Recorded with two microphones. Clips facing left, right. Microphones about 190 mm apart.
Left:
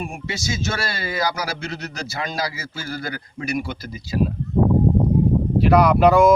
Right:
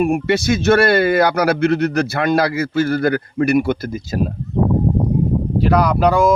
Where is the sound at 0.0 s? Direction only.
60° right (ahead or behind).